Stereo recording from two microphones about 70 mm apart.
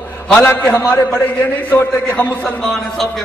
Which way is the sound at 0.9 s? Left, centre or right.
Left.